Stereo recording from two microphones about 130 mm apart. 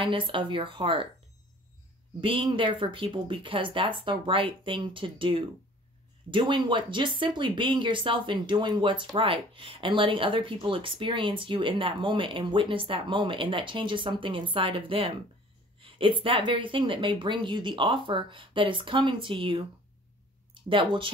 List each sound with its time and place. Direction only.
0.0 s speech: 40° right (ahead or behind)
2.1 s speech: 40° right (ahead or behind)